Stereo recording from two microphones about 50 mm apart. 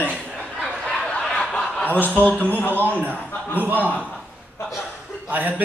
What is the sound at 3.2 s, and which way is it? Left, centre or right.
Speech, right.